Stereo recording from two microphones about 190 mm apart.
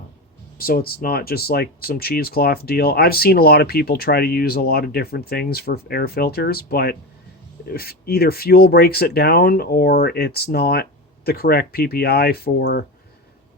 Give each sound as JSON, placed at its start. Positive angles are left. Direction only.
{"t": 0.6, "sound": "speech", "side_deg": 50}